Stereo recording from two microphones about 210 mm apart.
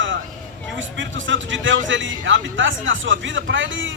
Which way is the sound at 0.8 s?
65° right (ahead or behind).